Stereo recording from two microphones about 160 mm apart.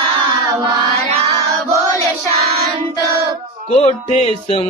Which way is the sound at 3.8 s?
40° left (ahead or behind).